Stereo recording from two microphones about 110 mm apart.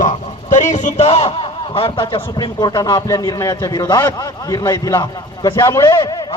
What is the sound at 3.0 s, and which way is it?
A man's voice, 35° left (ahead or behind).